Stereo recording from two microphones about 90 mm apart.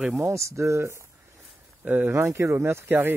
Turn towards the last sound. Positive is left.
turn(degrees=-25)  # may be behind; listen again after turning